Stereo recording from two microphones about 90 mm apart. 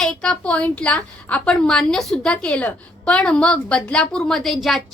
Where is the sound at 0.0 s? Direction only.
5° left (ahead or behind).